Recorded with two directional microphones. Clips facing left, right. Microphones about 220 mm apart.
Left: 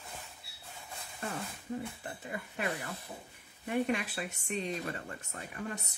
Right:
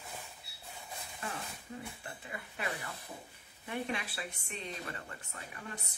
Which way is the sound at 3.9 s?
45° left (ahead or behind).